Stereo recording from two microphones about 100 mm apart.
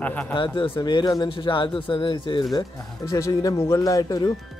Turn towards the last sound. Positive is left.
turn(degrees=35)  # may be behind; listen again after turning